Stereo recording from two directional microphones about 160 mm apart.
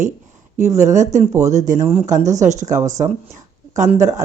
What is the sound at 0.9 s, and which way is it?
Speech, 50° right (ahead or behind).